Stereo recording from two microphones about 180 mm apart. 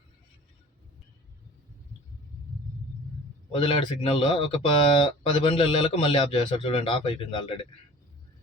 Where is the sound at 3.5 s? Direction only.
30° left (ahead or behind).